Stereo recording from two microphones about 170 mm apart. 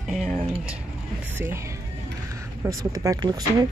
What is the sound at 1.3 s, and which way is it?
Speech, 15° right (ahead or behind).